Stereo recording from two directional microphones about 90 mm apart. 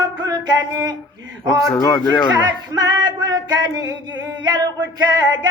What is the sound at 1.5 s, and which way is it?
Speech, 5° left (ahead or behind).